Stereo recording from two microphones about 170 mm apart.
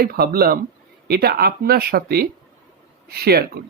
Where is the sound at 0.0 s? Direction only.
60° right (ahead or behind).